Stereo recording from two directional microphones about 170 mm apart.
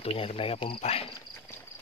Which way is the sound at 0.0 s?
35° left (ahead or behind).